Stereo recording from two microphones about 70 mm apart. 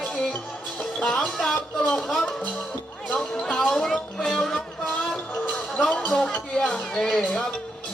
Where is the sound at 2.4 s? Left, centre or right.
Left.